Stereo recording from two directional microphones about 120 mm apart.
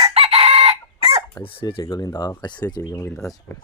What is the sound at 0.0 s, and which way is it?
Chicken, 55° right (ahead or behind).